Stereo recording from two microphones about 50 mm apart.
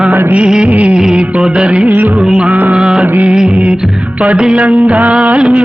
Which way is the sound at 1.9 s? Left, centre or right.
Right.